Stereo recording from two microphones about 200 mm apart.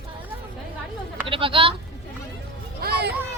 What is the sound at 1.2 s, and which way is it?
Speech, 25° right (ahead or behind).